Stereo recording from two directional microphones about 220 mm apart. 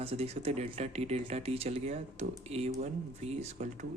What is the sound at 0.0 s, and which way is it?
Speech, 25° right (ahead or behind).